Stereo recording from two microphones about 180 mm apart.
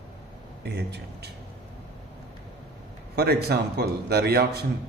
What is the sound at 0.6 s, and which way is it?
Speech, 65° right (ahead or behind).